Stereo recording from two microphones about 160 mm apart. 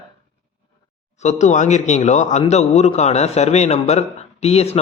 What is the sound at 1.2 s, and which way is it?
A man's voice, 45° left (ahead or behind).